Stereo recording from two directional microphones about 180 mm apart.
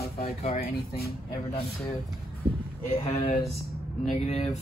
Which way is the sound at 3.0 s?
35° left (ahead or behind).